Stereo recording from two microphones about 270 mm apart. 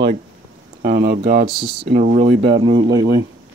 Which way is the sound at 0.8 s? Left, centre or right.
Right.